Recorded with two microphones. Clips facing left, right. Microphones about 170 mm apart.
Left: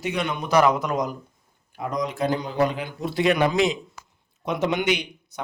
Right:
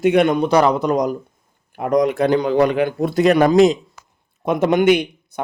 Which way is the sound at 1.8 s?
65° right (ahead or behind).